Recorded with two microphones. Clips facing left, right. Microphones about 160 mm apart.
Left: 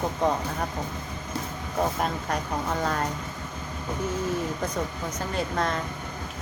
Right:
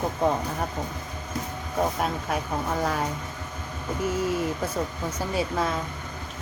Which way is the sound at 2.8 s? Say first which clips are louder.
Right 1 dB; 5° right (ahead or behind).